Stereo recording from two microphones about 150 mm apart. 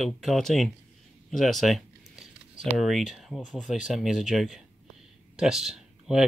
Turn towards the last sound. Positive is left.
turn(degrees=-5)  # may be behind; listen again after turning